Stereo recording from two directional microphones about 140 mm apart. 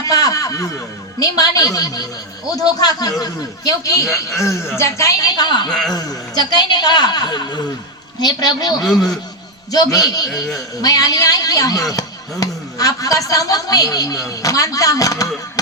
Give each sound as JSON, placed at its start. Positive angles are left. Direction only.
{"t": 0.0, "sound": "chuckle", "side_deg": 25}
{"t": 1.2, "sound": "a man's voice", "side_deg": 25}
{"t": 8.9, "sound": "a man's voice", "side_deg": 5}
{"t": 9.7, "sound": "a man's voice", "side_deg": 25}
{"t": 15.6, "sound": "chop", "side_deg": 25}